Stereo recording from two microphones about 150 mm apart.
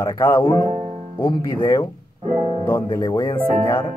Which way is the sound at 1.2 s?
25° left (ahead or behind).